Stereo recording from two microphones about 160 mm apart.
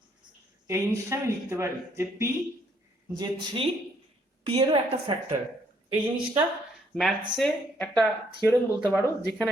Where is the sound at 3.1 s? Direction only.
25° right (ahead or behind).